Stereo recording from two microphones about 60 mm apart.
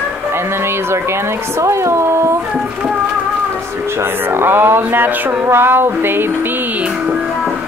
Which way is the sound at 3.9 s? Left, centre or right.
Right.